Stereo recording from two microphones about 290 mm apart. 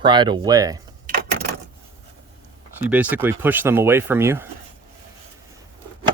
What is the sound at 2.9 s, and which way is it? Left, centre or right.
Speech, centre.